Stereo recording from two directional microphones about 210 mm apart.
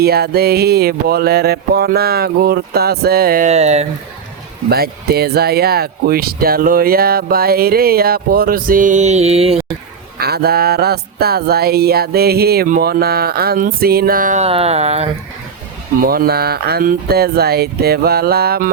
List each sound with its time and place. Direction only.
0.0 s speech: 50° right (ahead or behind); by 3.8 s 30° right (ahead or behind)
4.7 s speech: 50° right (ahead or behind); by 9.6 s 30° right (ahead or behind)
10.2 s speech: 50° right (ahead or behind); by 15.1 s 30° right (ahead or behind)
16.0 s speech: 45° right (ahead or behind)